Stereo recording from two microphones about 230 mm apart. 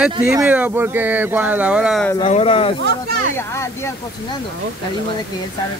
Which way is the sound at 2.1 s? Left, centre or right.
Left.